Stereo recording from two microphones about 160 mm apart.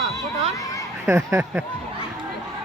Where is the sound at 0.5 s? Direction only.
20° left (ahead or behind).